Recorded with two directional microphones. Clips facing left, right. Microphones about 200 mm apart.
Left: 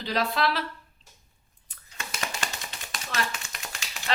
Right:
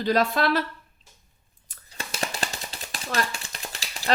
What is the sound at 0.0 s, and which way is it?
Speech, 45° right (ahead or behind).